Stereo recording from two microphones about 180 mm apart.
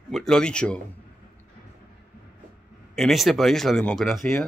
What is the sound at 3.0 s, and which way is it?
Speech, centre (ahead or behind).